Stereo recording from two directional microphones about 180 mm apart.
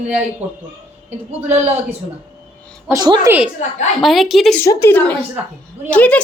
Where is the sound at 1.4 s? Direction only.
10° right (ahead or behind).